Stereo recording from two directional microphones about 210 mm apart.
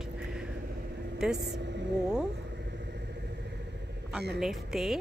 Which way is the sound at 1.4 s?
55° right (ahead or behind).